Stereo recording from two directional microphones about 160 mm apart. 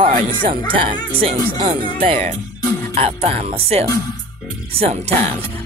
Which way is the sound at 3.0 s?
40° right (ahead or behind).